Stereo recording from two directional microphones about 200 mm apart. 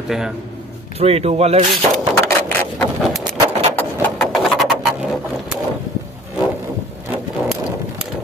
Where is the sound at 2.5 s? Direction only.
10° left (ahead or behind).